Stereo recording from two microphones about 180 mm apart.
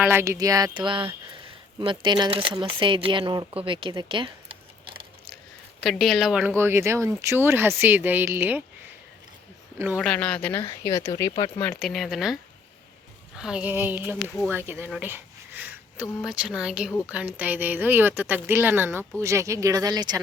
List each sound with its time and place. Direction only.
0.1 s speech: 15° right (ahead or behind)
5.8 s speech: centre (ahead or behind)
9.7 s a man's voice: 10° right (ahead or behind)
10.0 s speech: 5° left (ahead or behind); by 11.6 s 25° left (ahead or behind)
11.6 s speech: 5° left (ahead or behind); by 20.2 s 20° right (ahead or behind)